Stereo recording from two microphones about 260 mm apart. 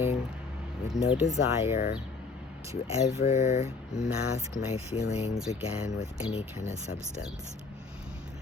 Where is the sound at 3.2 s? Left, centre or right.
Left.